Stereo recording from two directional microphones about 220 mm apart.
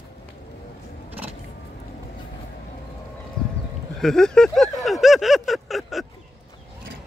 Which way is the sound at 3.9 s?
Centre (ahead or behind).